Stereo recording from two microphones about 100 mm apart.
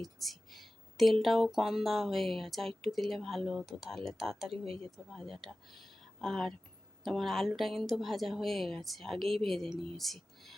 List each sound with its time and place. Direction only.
0.0 s a woman's voice: centre (ahead or behind)
4.5 s speech: 70° right (ahead or behind)
5.1 s a woman's voice: centre (ahead or behind)